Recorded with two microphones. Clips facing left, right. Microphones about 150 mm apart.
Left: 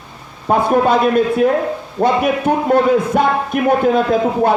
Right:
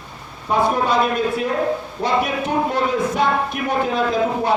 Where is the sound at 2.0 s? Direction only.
55° left (ahead or behind).